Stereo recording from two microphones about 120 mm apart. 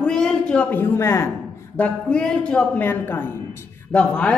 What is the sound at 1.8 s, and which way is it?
A man's voice, 10° left (ahead or behind).